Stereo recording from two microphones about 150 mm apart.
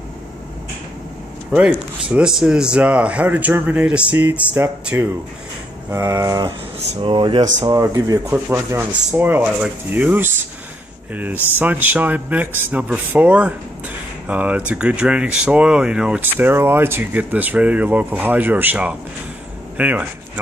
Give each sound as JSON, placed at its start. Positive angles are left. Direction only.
{"t": 1.5, "sound": "speech", "side_deg": -10}
{"t": 7.0, "sound": "speech", "side_deg": -35}
{"t": 7.6, "sound": "speech", "side_deg": -25}
{"t": 11.5, "sound": "speech", "side_deg": -10}